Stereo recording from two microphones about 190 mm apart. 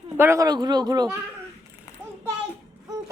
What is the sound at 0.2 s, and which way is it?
Speech, 15° right (ahead or behind).